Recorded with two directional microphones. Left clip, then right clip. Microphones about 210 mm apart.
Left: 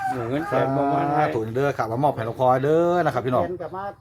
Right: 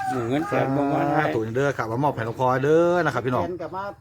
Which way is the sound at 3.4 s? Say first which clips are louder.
Left 1 dB; 30° right (ahead or behind).